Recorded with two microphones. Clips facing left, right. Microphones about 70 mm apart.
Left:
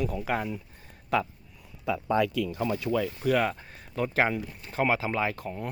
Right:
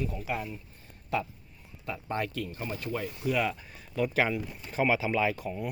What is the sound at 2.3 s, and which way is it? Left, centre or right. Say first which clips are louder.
Speech: left 7 dB; left.